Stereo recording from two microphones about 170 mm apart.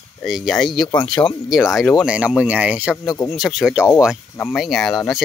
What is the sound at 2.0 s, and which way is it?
Speech, 5° right (ahead or behind).